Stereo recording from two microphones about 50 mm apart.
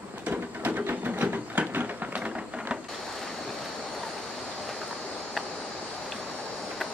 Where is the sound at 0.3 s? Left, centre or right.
Right.